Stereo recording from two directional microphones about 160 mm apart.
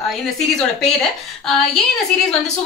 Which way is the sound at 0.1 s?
5° left (ahead or behind).